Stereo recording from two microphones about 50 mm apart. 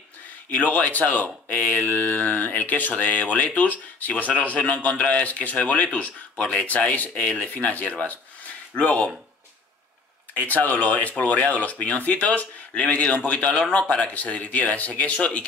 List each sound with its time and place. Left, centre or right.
0.5 s speech: left
10.3 s speech: left